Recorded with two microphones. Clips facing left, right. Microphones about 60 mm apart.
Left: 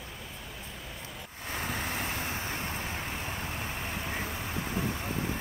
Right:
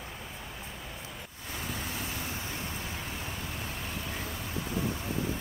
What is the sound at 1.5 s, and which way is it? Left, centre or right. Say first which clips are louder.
Vehicle: left 4 dB; left.